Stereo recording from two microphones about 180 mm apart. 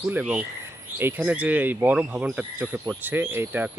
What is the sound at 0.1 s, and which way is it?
Speech, 10° right (ahead or behind).